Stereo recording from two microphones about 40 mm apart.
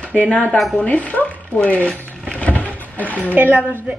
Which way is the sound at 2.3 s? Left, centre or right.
Left.